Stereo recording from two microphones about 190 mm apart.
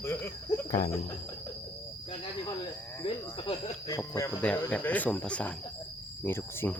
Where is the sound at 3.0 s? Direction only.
25° left (ahead or behind).